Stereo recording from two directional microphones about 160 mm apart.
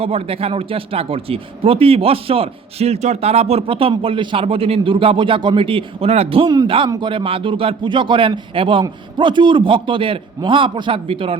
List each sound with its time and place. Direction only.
0.0 s a man's voice: 40° right (ahead or behind)